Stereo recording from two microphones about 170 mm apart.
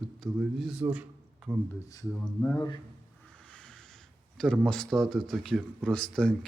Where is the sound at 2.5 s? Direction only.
25° left (ahead or behind).